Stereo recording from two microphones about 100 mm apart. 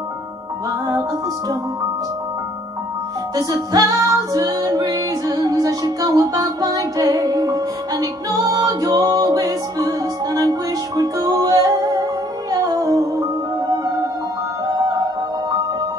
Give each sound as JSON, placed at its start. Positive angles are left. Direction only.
{"t": 0.7, "sound": "music", "side_deg": -35}
{"t": 3.3, "sound": "music", "side_deg": -35}